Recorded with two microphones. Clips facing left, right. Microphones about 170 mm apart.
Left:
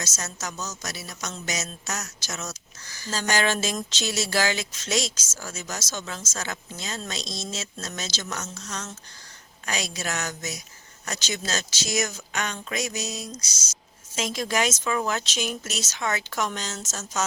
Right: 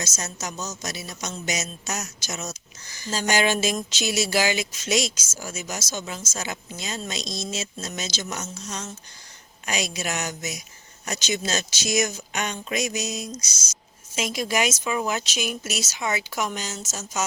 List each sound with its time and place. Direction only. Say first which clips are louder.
0.0 s speech: right 2 dB; 15° right (ahead or behind)